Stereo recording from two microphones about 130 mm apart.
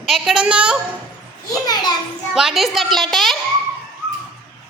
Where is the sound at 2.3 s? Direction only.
Centre (ahead or behind).